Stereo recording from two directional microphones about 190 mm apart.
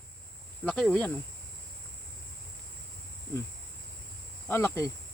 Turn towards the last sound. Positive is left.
turn(degrees=15)  # may be behind; listen again after turning